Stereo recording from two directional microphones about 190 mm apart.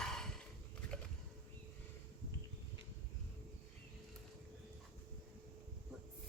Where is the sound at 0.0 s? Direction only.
5° left (ahead or behind).